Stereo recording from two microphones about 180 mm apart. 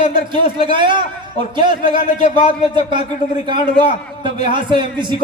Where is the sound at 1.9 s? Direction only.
45° left (ahead or behind).